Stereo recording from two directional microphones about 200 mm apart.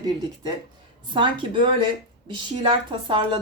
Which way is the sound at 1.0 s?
25° right (ahead or behind).